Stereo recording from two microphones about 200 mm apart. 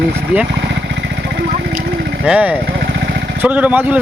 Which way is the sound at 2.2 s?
5° right (ahead or behind).